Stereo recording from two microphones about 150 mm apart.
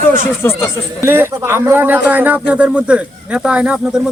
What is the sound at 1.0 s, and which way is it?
Speech, 15° right (ahead or behind).